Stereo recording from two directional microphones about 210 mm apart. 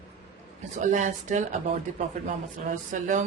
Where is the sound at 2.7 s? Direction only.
35° right (ahead or behind).